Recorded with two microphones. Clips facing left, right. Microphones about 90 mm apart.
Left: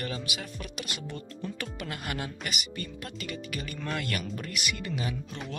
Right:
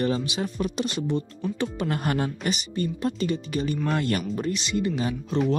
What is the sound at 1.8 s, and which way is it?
Speech, 35° right (ahead or behind).